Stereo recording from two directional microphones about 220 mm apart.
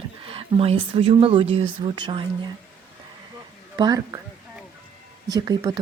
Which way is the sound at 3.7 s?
20° right (ahead or behind).